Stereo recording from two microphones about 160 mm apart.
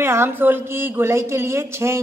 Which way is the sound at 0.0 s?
15° right (ahead or behind).